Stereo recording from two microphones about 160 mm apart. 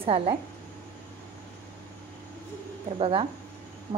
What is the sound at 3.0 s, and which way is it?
Speech, 35° right (ahead or behind).